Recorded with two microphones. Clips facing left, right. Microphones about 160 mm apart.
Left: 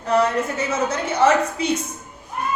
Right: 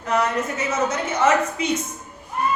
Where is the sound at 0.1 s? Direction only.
30° left (ahead or behind).